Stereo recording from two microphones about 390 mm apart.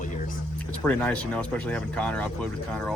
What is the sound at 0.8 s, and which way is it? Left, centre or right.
Speech, centre.